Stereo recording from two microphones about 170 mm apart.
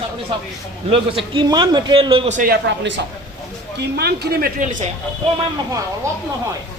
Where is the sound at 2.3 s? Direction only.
55° right (ahead or behind).